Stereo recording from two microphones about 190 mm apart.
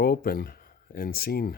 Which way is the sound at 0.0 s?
55° left (ahead or behind).